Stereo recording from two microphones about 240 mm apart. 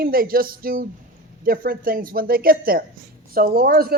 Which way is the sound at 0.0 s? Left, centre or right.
Right.